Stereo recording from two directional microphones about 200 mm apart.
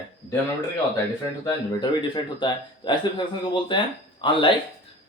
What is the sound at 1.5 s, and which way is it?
A man's voice, 20° left (ahead or behind).